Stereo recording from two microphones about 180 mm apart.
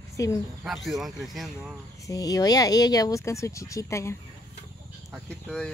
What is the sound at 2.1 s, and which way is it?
Speech, 20° left (ahead or behind).